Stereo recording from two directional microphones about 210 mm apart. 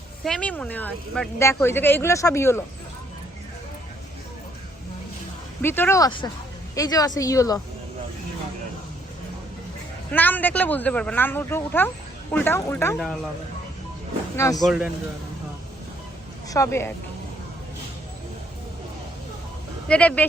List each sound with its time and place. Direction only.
0.3 s a woman's voice: 5° left (ahead or behind)
5.6 s a woman's voice: 10° left (ahead or behind)
10.1 s a woman's voice: 10° left (ahead or behind)
14.3 s a woman's voice: 15° left (ahead or behind)
14.6 s a man's voice: 5° right (ahead or behind)
16.5 s a woman's voice: 15° left (ahead or behind)
19.9 s a woman's voice: 5° left (ahead or behind)